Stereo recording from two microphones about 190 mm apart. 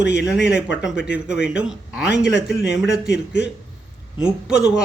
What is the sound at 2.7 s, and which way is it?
Speech, 65° left (ahead or behind).